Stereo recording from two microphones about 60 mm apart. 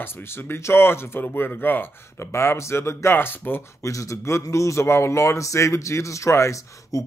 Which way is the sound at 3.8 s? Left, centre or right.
Left.